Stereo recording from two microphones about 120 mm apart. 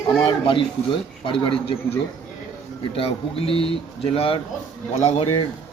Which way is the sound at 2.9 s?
50° left (ahead or behind).